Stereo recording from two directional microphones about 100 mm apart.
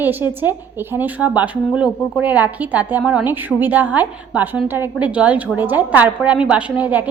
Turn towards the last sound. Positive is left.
turn(degrees=-15)  # may be behind; listen again after turning